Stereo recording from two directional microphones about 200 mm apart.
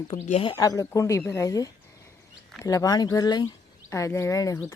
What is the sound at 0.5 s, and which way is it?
Speech, 15° left (ahead or behind).